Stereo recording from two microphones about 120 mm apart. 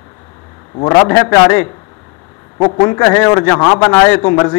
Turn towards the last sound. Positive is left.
turn(degrees=20)  # may be behind; listen again after turning